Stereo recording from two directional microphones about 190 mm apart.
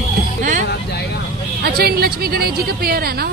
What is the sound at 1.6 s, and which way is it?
A woman's voice, 55° right (ahead or behind).